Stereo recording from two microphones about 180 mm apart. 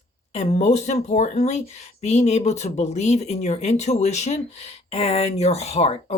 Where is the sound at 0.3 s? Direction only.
40° left (ahead or behind).